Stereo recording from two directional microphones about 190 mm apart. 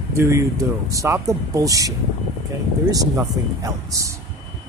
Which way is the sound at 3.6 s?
15° right (ahead or behind).